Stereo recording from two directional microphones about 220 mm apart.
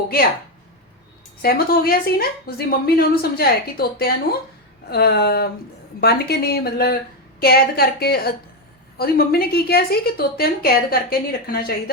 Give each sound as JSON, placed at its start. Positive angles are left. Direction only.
{"t": 1.4, "sound": "a woman's voice", "side_deg": 45}